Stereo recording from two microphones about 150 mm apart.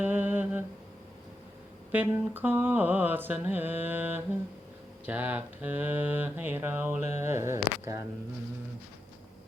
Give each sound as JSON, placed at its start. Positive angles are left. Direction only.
{"t": 0.0, "sound": "humming", "side_deg": -10}
{"t": 1.9, "sound": "mantra", "side_deg": -10}
{"t": 7.2, "sound": "speech", "side_deg": -15}